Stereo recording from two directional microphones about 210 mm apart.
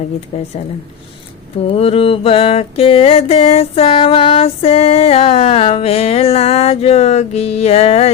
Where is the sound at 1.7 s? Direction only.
30° left (ahead or behind).